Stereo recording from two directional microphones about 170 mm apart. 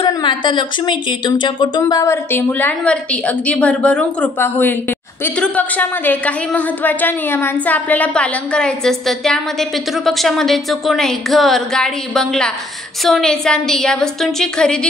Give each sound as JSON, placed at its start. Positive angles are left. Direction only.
{"t": 0.0, "sound": "a woman's voice", "side_deg": 25}